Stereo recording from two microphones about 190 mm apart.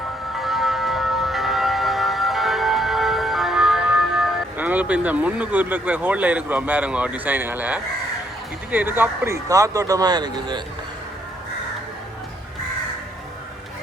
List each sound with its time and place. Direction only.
0.3 s music: centre (ahead or behind)
8.7 s a man's voice: 10° right (ahead or behind)